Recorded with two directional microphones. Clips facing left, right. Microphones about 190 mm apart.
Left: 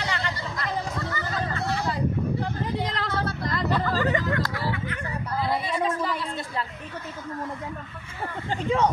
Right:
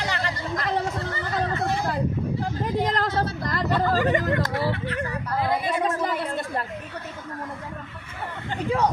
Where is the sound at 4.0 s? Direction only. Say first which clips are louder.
Right 3 dB; 20° right (ahead or behind).